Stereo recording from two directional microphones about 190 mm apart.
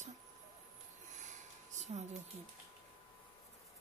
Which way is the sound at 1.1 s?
40° right (ahead or behind).